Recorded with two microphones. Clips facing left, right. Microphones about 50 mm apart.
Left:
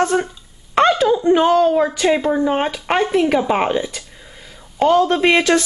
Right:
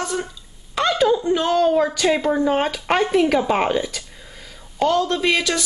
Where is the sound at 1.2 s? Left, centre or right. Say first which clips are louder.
Left 6 dB; left.